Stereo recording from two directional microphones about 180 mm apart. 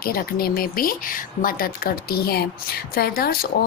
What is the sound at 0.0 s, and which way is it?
A woman's voice, 55° left (ahead or behind).